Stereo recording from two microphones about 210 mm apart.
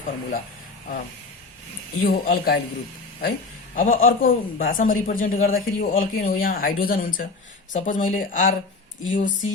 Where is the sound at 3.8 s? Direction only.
40° left (ahead or behind).